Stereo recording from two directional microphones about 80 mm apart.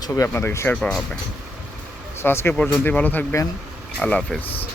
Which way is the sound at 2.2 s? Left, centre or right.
Left.